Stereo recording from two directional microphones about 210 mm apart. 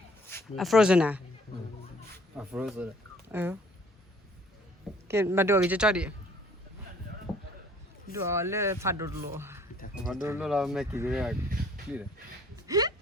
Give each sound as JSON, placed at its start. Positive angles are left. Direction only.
{"t": 0.5, "sound": "speech", "side_deg": 0}
{"t": 2.3, "sound": "speech", "side_deg": -5}
{"t": 5.0, "sound": "speech", "side_deg": -10}
{"t": 7.3, "sound": "a sound", "side_deg": 0}
{"t": 8.3, "sound": "speech", "side_deg": -10}
{"t": 9.9, "sound": "a sound", "side_deg": 0}
{"t": 10.2, "sound": "speech", "side_deg": -5}
{"t": 12.6, "sound": "speech", "side_deg": -15}